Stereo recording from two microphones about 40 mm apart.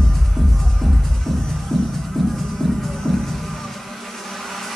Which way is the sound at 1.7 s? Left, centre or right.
Centre.